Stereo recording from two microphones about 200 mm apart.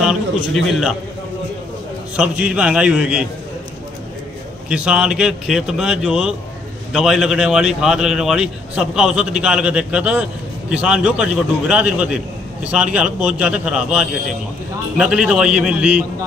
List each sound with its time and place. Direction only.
0.0 s a man's voice: centre (ahead or behind)
2.1 s a man's voice: 5° right (ahead or behind)
4.6 s a man's voice: 5° right (ahead or behind)